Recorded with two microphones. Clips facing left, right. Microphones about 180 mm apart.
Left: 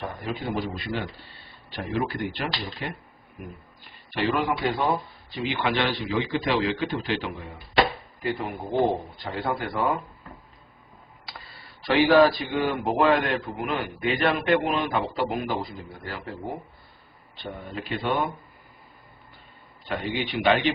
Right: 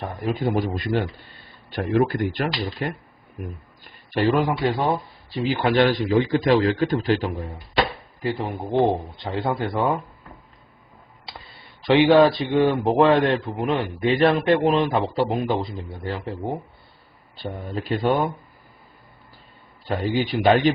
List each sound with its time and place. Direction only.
0.3 s a man's voice: 50° right (ahead or behind)
4.1 s a man's voice: 45° right (ahead or behind)
8.2 s a man's voice: 30° right (ahead or behind)
11.9 s a man's voice: 20° right (ahead or behind)
17.3 s speech: 40° right (ahead or behind)
19.9 s speech: 40° right (ahead or behind)